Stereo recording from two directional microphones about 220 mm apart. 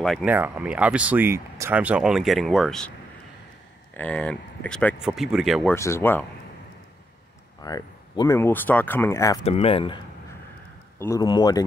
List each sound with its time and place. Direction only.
0.0 s speech: centre (ahead or behind)
3.9 s speech: 5° left (ahead or behind)
5.8 s speech: 10° left (ahead or behind)
7.6 s speech: 15° left (ahead or behind)
9.4 s speech: 30° left (ahead or behind)
11.0 s speech: 15° left (ahead or behind)